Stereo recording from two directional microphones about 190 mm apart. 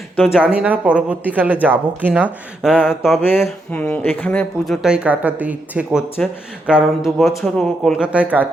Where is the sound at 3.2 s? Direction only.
10° left (ahead or behind).